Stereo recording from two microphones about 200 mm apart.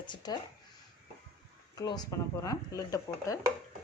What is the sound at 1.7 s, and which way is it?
Speech, 20° left (ahead or behind).